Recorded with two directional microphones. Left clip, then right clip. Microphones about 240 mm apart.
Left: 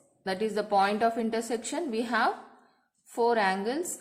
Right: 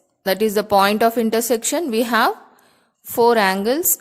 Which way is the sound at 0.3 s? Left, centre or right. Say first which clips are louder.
Right 11 dB; right.